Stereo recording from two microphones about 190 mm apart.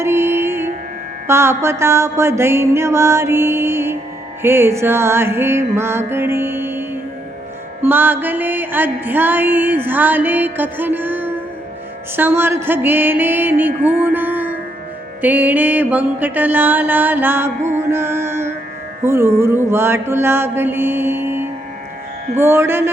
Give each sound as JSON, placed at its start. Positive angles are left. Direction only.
{"t": 0.0, "sound": "music", "side_deg": -10}
{"t": 17.6, "sound": "music", "side_deg": -40}
{"t": 17.9, "sound": "music", "side_deg": -10}